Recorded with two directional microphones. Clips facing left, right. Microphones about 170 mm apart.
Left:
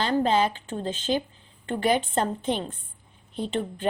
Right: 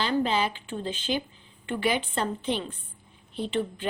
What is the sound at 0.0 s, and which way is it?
A woman's voice, 45° left (ahead or behind).